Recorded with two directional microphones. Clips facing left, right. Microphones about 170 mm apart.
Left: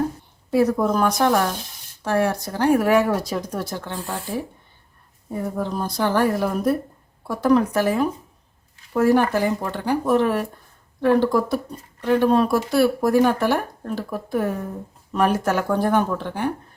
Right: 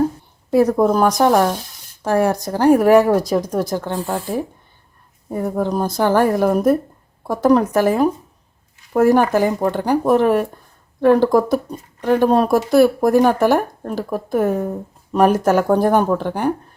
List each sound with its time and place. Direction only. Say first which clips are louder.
0.5 s a woman's voice: right 4 dB; 45° right (ahead or behind)
5.3 s a woman's voice: right 6 dB; 45° right (ahead or behind)